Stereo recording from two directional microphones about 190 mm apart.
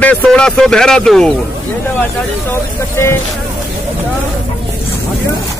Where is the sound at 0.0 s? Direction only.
5° left (ahead or behind).